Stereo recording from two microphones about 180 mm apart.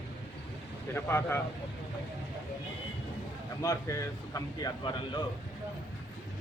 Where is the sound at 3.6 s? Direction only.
20° left (ahead or behind).